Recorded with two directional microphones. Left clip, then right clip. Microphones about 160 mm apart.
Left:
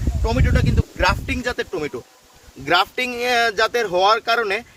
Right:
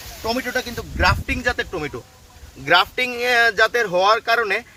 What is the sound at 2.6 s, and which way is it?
Speech, 90° left.